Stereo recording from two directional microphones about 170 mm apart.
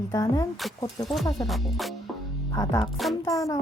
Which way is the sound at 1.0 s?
Centre (ahead or behind).